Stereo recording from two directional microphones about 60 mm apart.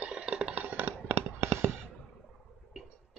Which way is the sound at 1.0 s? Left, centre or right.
Right.